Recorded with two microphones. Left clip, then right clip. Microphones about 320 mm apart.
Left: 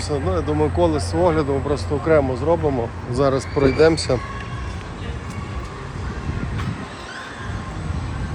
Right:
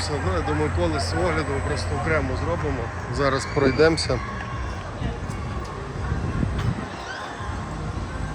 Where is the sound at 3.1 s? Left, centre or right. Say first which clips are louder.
Left 4 dB; centre.